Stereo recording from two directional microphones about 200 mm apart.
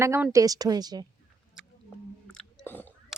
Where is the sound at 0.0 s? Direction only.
15° right (ahead or behind).